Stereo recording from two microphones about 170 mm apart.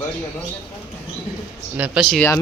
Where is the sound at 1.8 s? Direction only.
Centre (ahead or behind).